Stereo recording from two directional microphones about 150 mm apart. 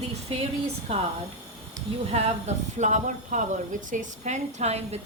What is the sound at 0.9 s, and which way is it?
Speech, 40° right (ahead or behind).